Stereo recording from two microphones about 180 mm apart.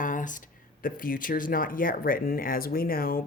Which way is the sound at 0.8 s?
50° left (ahead or behind).